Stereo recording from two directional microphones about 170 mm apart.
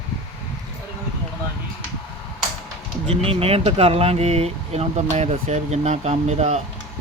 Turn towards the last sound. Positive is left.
turn(degrees=-40)  # may be behind; listen again after turning